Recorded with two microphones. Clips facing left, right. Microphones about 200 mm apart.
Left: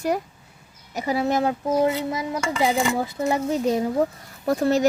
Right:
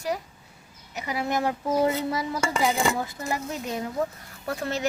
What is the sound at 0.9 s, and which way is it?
Speech, 35° left (ahead or behind).